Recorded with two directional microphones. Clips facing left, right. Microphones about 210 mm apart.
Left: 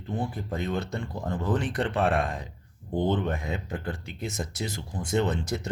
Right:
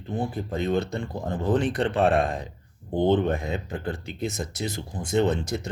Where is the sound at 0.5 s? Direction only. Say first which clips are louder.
Right 5 dB; 25° right (ahead or behind).